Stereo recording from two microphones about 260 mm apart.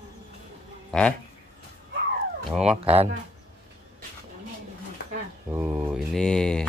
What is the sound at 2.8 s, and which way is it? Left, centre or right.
Speech, right.